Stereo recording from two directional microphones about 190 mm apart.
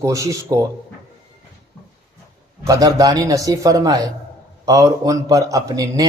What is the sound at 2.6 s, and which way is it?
A man's voice, 20° right (ahead or behind).